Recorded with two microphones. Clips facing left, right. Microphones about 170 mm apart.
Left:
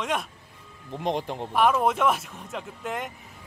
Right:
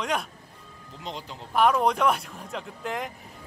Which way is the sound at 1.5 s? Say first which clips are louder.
Right 1 dB; centre (ahead or behind).